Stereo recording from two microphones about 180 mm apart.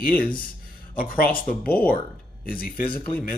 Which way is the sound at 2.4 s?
50° left (ahead or behind).